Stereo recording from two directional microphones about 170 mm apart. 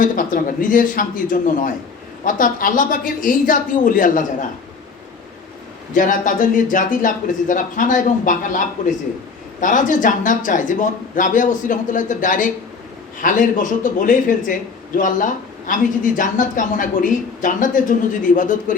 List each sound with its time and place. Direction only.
0.0 s speech: 50° left (ahead or behind)
5.9 s speech: 50° left (ahead or behind)